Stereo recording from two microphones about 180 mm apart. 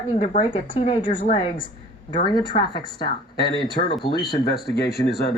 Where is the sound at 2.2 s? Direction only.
25° left (ahead or behind).